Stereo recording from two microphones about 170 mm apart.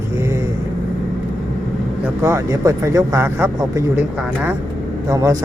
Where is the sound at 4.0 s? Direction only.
5° right (ahead or behind).